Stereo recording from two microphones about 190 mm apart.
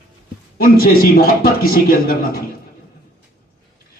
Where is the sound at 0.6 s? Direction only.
50° left (ahead or behind).